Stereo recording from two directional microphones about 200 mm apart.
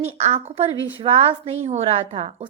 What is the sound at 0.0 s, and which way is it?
A woman's voice, 35° right (ahead or behind).